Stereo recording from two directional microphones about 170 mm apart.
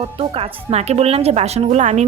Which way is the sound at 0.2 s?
35° right (ahead or behind).